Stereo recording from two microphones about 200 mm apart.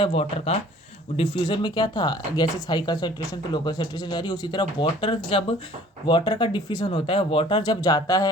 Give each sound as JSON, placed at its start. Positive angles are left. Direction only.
{"t": 0.0, "sound": "speech", "side_deg": 30}